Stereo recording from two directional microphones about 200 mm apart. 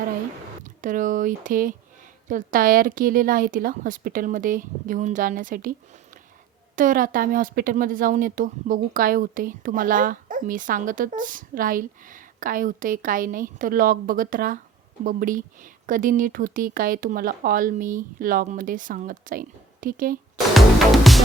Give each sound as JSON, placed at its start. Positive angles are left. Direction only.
{"t": 0.6, "sound": "speech", "side_deg": -40}
{"t": 6.7, "sound": "speech", "side_deg": -40}
{"t": 20.5, "sound": "music", "side_deg": 0}